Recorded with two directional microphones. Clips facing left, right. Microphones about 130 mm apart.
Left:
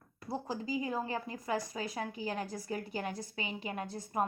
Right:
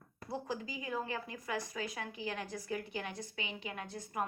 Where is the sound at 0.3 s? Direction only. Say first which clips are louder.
Left 3 dB; 35° left (ahead or behind).